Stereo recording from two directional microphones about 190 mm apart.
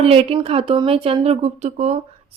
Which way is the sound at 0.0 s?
30° right (ahead or behind).